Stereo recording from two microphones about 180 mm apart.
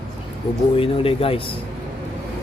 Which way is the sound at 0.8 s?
30° left (ahead or behind).